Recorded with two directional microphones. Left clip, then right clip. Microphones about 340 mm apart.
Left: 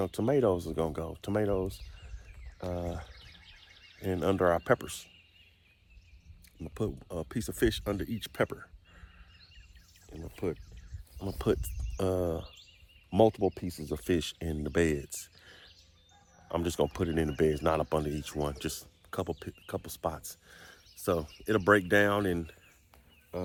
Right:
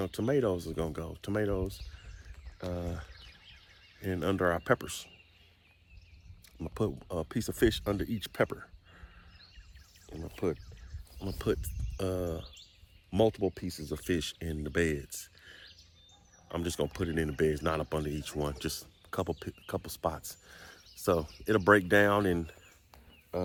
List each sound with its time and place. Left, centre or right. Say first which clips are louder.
0.0 s speech: left 2 dB; centre
6.6 s speech: right 2 dB; centre
10.1 s speech: right 2 dB; centre
11.3 s speech: left 2 dB; centre